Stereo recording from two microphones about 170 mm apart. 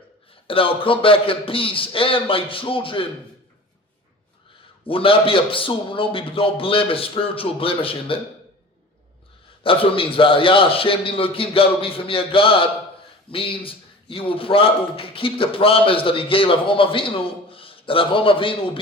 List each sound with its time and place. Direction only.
0.4 s a man's voice: 30° left (ahead or behind)
4.9 s a man's voice: 30° left (ahead or behind)
9.6 s a man's voice: 30° left (ahead or behind)